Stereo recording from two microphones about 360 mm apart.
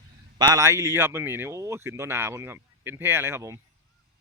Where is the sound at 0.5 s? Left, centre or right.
Centre.